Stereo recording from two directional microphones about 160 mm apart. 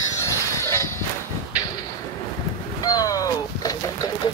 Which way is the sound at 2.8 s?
25° left (ahead or behind).